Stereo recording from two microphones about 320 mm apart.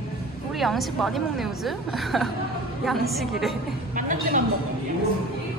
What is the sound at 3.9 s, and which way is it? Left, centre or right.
Speech, right.